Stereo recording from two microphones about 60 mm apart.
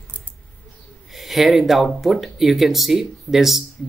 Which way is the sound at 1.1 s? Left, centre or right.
Centre.